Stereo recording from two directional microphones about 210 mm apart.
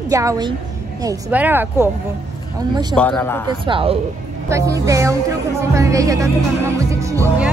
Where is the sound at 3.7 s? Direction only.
25° right (ahead or behind).